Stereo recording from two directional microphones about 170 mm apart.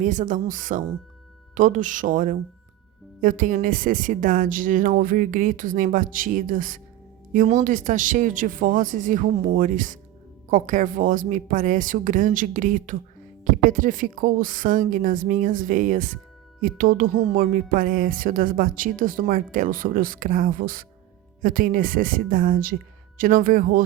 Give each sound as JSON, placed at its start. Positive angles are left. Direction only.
{"t": 0.0, "sound": "speech", "side_deg": -45}